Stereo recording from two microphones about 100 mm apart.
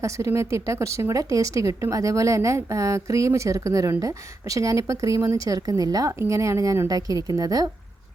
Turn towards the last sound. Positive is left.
turn(degrees=-40)  # may be behind; listen again after turning